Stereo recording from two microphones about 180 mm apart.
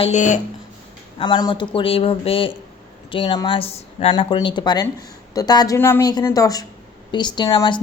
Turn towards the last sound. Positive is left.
turn(degrees=20)  # may be behind; listen again after turning